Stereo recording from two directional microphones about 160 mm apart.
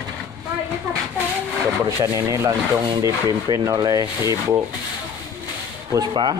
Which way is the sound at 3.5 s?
20° right (ahead or behind).